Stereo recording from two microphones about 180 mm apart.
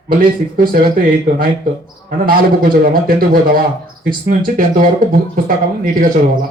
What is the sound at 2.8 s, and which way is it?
Speech, 50° right (ahead or behind).